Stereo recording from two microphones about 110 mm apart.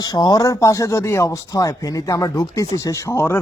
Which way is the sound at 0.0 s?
35° left (ahead or behind).